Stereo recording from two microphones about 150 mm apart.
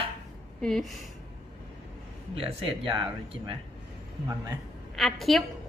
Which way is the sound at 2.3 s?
35° right (ahead or behind).